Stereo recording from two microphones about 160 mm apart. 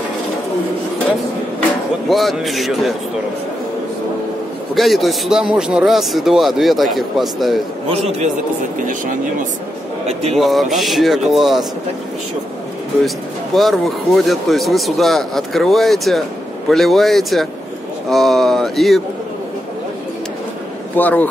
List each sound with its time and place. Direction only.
2.0 s speech: centre (ahead or behind)
4.7 s speech: centre (ahead or behind)
7.9 s a man's voice: 40° right (ahead or behind)
10.3 s speech: centre (ahead or behind)
13.6 s speech: centre (ahead or behind)
20.9 s a man's voice: 10° left (ahead or behind)